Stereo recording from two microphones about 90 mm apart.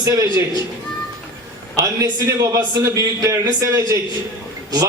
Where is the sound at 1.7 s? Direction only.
35° right (ahead or behind).